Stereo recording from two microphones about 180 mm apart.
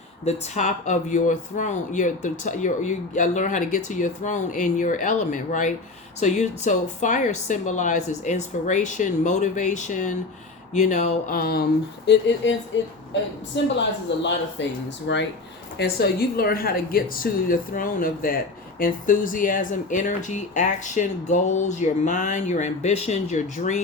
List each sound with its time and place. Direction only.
0.3 s speech: 40° left (ahead or behind)
11.3 s speech: 55° left (ahead or behind)
12.4 s speech: 90° left
14.1 s speech: 75° left (ahead or behind)
15.8 s speech: 60° left (ahead or behind); by 23.8 s 40° left (ahead or behind)